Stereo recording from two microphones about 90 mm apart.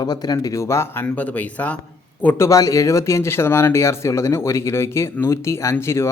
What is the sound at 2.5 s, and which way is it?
Speech, 40° left (ahead or behind).